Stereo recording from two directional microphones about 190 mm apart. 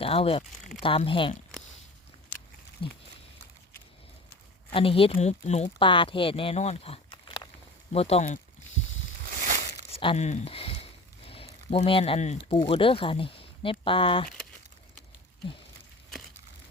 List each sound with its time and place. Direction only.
0.0 s speech: 30° left (ahead or behind)
2.8 s speech: 25° left (ahead or behind)
4.7 s speech: 30° left (ahead or behind)
9.3 s a sound: 45° right (ahead or behind)
9.9 s speech: 30° left (ahead or behind)